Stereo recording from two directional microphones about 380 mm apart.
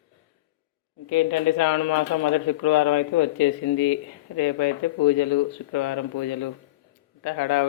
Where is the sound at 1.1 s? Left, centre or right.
Left.